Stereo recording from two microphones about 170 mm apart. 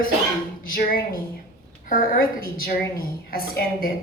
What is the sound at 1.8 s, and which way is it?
A woman's voice, 55° left (ahead or behind).